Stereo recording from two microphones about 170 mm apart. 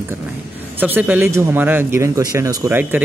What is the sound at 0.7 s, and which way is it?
Speech, 10° right (ahead or behind).